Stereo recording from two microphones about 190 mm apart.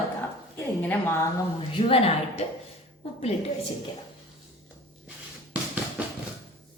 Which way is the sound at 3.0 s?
30° left (ahead or behind).